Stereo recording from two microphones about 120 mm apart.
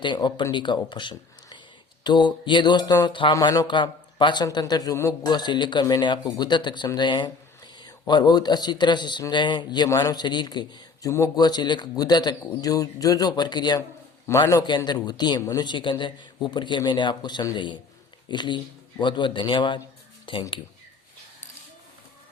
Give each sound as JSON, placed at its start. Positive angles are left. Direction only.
{"t": 0.0, "sound": "a man's voice", "side_deg": 40}
{"t": 0.9, "sound": "a sound", "side_deg": 40}
{"t": 2.0, "sound": "a man's voice", "side_deg": 40}
{"t": 3.1, "sound": "speech", "side_deg": 45}
{"t": 3.3, "sound": "a man's voice", "side_deg": 30}
{"t": 14.3, "sound": "a man's voice", "side_deg": 25}
{"t": 14.8, "sound": "a man's voice", "side_deg": 35}